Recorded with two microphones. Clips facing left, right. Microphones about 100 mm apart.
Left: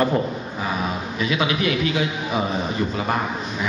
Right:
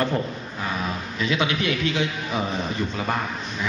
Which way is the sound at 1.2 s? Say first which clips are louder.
Left 2 dB; 5° left (ahead or behind).